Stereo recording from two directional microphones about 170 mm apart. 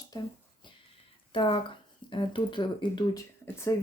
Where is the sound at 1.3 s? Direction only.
30° left (ahead or behind).